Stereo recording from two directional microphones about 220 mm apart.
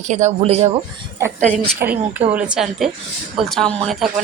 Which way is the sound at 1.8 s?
5° right (ahead or behind).